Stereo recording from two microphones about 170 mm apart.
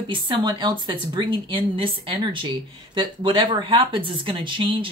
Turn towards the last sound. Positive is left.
turn(degrees=-30)  # may be behind; listen again after turning